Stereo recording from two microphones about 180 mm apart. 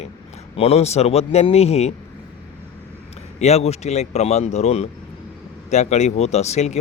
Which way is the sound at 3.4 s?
35° left (ahead or behind).